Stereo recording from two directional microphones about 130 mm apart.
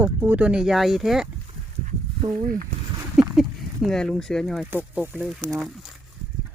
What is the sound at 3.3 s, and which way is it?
Speech, centre (ahead or behind).